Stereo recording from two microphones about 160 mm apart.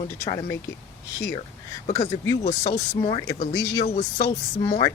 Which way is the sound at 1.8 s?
45° left (ahead or behind).